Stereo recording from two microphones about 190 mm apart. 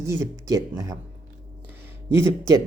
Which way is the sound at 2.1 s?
15° right (ahead or behind).